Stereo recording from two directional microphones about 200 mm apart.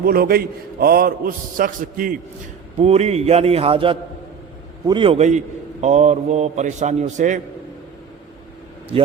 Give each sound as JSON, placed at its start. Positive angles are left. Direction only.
{"t": 0.0, "sound": "a man's voice", "side_deg": -50}
{"t": 2.7, "sound": "a man's voice", "side_deg": -30}